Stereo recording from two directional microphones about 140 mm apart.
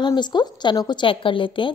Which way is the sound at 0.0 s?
30° left (ahead or behind).